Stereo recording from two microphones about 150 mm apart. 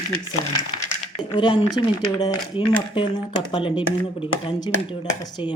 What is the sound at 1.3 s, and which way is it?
Speech, 35° left (ahead or behind).